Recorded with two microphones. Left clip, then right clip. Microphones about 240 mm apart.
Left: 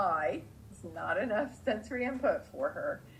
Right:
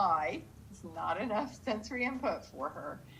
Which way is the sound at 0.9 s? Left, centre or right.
Right.